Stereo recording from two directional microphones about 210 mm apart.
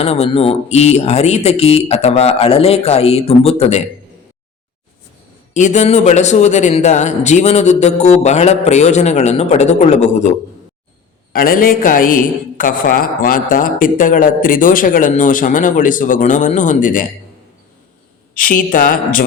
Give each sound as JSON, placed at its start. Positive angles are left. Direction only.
{"t": 0.0, "sound": "speech", "side_deg": 30}
{"t": 5.5, "sound": "a man's voice", "side_deg": 35}
{"t": 11.3, "sound": "a man's voice", "side_deg": 45}
{"t": 18.3, "sound": "a man's voice", "side_deg": 40}